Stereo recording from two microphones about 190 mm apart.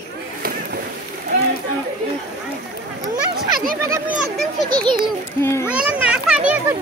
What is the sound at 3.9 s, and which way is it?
Speech, 5° right (ahead or behind).